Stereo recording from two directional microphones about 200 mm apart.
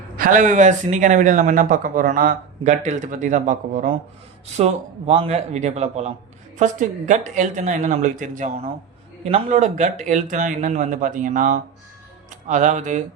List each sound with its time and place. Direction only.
0.2 s speech: 40° right (ahead or behind)